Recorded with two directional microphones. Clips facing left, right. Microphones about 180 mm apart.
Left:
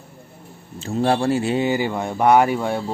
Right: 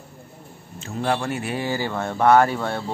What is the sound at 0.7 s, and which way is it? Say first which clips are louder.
Speech: left 5 dB; 35° left (ahead or behind).